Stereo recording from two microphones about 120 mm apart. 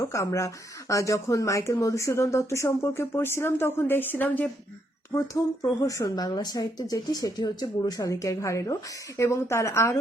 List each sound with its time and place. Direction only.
0.0 s speech: 25° left (ahead or behind)
5.1 s speech: 25° left (ahead or behind)